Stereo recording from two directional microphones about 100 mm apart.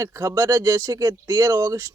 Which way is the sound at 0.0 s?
30° right (ahead or behind).